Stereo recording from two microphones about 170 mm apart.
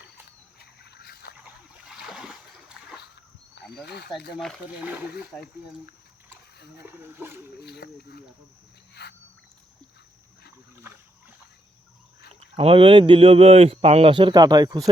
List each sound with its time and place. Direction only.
0.6 s a sound: 70° left (ahead or behind)
1.8 s splash: 5° right (ahead or behind)
3.6 s wild animals: 75° left (ahead or behind)
4.4 s speech: 5° left (ahead or behind)
4.8 s speech: 10° right (ahead or behind)
6.3 s a sound: 70° left (ahead or behind)
6.8 s speech: 15° right (ahead or behind)
7.6 s speech: 75° left (ahead or behind)
9.0 s a sound: 75° left (ahead or behind)
12.5 s speech: 30° right (ahead or behind)